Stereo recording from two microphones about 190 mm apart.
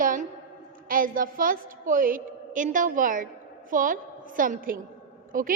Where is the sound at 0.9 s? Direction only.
45° right (ahead or behind).